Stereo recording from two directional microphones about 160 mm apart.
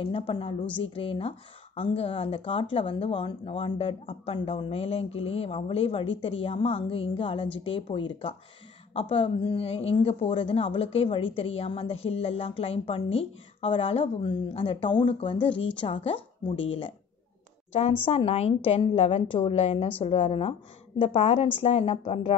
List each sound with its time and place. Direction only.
0.0 s a woman's voice: 35° left (ahead or behind)
18.0 s a woman's voice: 40° left (ahead or behind)